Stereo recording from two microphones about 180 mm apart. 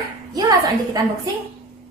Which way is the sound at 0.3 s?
20° right (ahead or behind).